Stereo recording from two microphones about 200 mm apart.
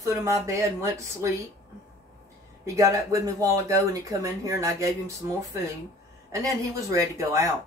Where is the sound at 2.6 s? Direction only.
15° right (ahead or behind).